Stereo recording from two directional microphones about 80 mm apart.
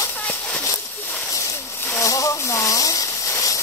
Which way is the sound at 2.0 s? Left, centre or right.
Left.